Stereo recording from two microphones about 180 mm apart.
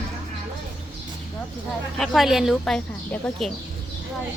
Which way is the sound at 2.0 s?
Centre (ahead or behind).